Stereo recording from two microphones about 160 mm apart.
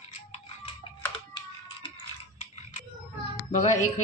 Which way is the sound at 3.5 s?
50° left (ahead or behind).